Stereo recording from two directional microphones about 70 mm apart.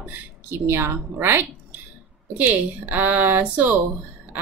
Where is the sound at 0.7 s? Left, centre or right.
Right.